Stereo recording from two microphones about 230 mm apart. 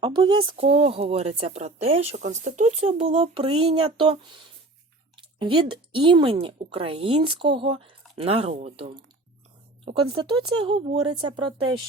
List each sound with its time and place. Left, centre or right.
0.0 s a woman's voice: right